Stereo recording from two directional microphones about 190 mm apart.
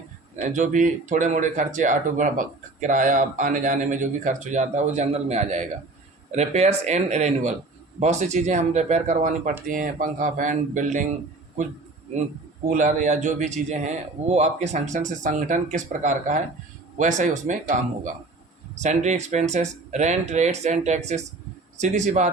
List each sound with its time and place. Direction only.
0.3 s speech: 40° right (ahead or behind)
12.6 s speech: 45° right (ahead or behind)